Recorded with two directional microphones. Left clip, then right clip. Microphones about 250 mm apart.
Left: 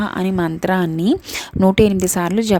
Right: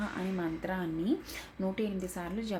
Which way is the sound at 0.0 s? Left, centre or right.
Left.